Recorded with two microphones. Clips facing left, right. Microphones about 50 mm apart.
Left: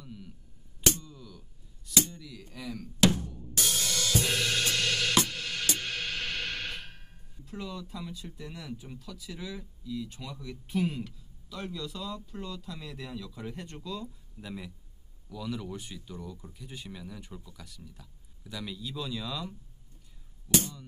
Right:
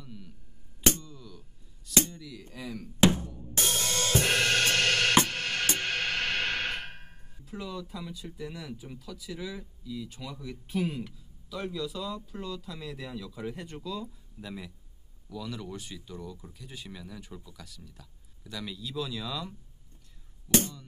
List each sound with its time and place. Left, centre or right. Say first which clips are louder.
0.0 s music: left 1 dB; centre
2.1 s a sound: right 2 dB; centre
2.5 s music: even; centre
3.0 s drum: right 2 dB; right
3.3 s drum kit: right 1 dB; centre
3.5 s drum kit: right 2 dB; right
4.2 s music: right 6 dB; right
7.4 s music: right 1 dB; centre
7.9 s speech: right 1 dB; centre